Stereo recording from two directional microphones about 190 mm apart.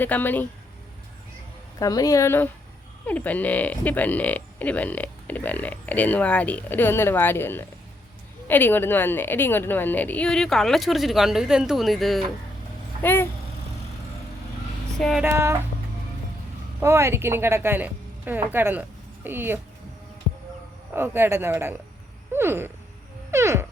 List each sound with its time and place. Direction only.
0.0 s speech: 10° left (ahead or behind)
1.8 s a woman's voice: 20° left (ahead or behind); by 12.2 s centre (ahead or behind)
13.0 s speech: 10° left (ahead or behind)
14.9 s a sound: centre (ahead or behind)
15.2 s speech: 15° right (ahead or behind)
16.8 s a woman's voice: 15° right (ahead or behind)
20.9 s speech: 10° right (ahead or behind)
22.3 s a sound: 10° right (ahead or behind)
23.3 s music: 15° right (ahead or behind)